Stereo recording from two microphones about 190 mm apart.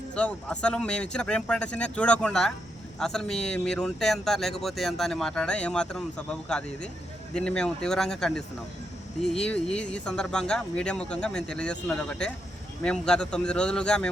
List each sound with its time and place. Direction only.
0.1 s a man's voice: 5° left (ahead or behind)